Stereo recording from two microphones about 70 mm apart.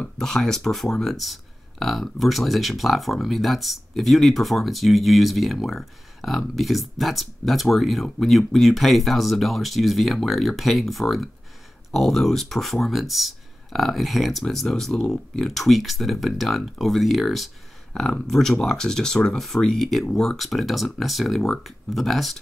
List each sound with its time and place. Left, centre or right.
0.2 s speech: centre